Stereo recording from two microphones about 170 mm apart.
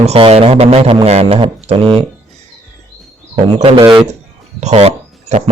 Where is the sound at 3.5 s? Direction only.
35° right (ahead or behind).